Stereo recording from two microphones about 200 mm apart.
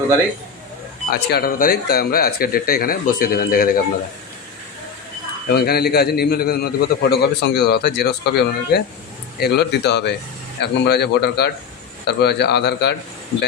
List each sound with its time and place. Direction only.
1.1 s a man's voice: 50° left (ahead or behind)
5.5 s a man's voice: 50° left (ahead or behind)